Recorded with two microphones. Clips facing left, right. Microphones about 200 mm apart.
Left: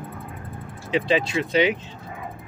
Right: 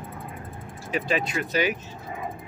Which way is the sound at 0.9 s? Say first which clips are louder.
Left 5 dB; 25° left (ahead or behind).